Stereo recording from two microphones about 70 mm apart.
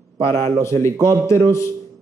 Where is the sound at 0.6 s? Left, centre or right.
Left.